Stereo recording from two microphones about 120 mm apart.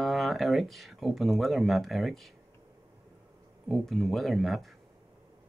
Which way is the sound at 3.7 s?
Centre (ahead or behind).